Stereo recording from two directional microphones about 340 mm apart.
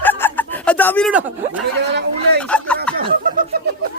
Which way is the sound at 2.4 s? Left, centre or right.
Centre.